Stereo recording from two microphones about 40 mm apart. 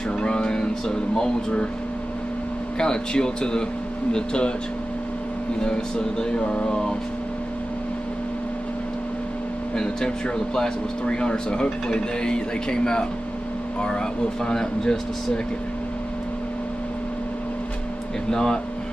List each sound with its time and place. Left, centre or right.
0.2 s speech: left
2.8 s speech: left
5.6 s speech: left
9.8 s speech: centre
18.3 s speech: centre